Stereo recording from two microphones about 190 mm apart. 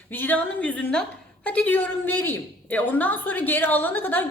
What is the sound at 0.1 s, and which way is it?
A woman's voice, 10° left (ahead or behind).